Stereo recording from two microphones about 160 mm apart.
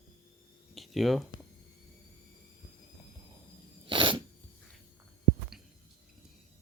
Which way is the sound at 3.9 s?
30° right (ahead or behind).